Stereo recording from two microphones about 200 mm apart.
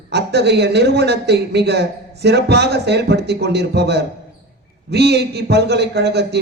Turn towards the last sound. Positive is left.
turn(degrees=-55)  # may be behind; listen again after turning